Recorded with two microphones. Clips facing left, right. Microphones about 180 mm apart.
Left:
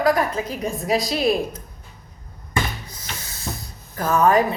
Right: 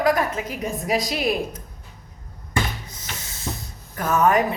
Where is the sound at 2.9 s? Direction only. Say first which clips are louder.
Left 1 dB; 20° right (ahead or behind).